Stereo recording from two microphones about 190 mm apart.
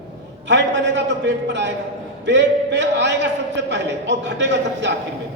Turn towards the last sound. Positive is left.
turn(degrees=-65)  # may be behind; listen again after turning